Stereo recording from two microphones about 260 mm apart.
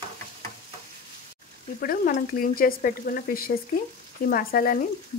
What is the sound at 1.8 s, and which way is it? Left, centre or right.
Frying, left.